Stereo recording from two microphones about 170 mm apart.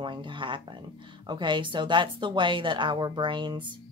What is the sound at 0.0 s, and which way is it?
Speech, 30° right (ahead or behind).